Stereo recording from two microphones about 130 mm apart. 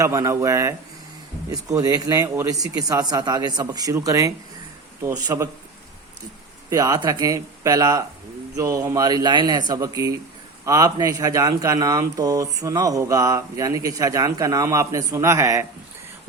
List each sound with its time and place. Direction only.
0.0 s speech: 25° right (ahead or behind)
6.7 s speech: 25° right (ahead or behind)